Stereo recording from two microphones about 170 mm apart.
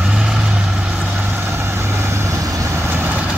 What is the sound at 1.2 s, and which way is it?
Vehicle, 10° right (ahead or behind).